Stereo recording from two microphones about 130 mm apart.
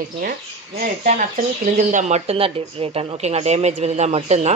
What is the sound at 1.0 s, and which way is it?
Speech, 85° right.